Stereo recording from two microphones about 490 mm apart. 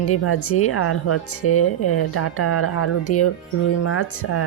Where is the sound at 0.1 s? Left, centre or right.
Left.